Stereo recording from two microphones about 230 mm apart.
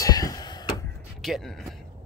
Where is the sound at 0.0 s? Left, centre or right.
Centre.